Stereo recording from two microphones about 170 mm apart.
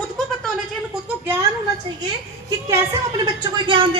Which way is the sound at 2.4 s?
20° right (ahead or behind).